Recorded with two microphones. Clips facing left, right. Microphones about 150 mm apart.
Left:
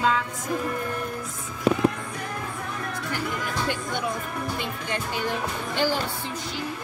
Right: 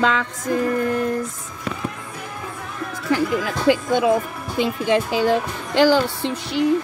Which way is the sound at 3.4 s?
90° right.